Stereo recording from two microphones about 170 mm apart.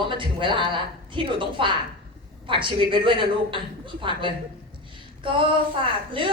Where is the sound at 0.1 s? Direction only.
30° right (ahead or behind).